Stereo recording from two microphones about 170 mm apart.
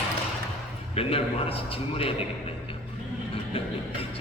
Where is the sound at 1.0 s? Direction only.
35° left (ahead or behind).